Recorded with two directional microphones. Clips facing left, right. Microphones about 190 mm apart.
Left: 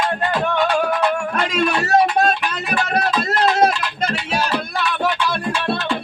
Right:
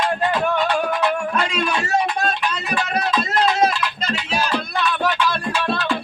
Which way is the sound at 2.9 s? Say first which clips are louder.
Left 1 dB; 55° left (ahead or behind).